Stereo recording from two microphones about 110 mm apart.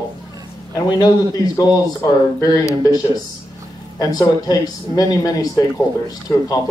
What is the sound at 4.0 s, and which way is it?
Speech, 35° left (ahead or behind).